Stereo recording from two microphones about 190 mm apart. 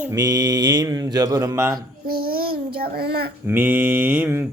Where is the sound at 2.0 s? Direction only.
50° right (ahead or behind).